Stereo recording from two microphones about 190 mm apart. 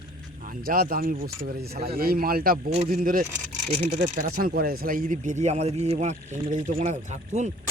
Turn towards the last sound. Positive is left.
turn(degrees=-40)  # may be behind; listen again after turning